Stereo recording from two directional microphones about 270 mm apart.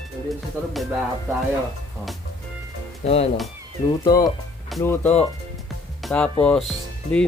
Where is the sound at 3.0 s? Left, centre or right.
Left.